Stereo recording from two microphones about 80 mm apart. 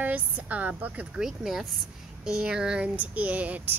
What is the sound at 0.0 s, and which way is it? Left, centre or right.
Speech, centre.